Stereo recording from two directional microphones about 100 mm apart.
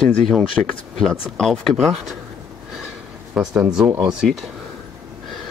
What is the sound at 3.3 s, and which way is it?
Speech, 5° right (ahead or behind).